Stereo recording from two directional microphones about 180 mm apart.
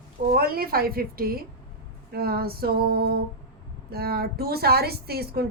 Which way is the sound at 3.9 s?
60° right (ahead or behind).